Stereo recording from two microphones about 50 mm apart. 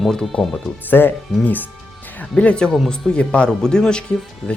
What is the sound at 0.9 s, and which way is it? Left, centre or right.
Speech, left.